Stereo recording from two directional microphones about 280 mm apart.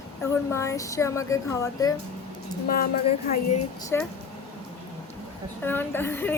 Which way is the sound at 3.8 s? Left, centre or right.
Centre.